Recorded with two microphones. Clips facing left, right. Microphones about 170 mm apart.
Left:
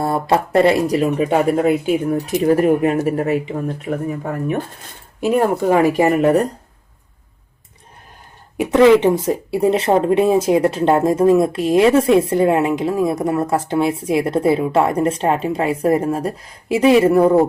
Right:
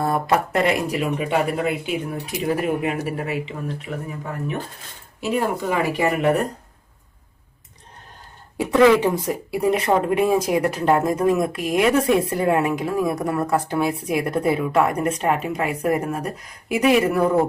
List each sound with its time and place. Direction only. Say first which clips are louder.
0.0 s speech: left 3 dB; 30° left (ahead or behind)
8.5 s speech: left 4 dB; 20° left (ahead or behind)